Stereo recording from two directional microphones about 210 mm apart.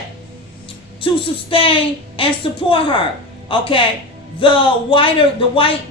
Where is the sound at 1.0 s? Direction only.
25° left (ahead or behind).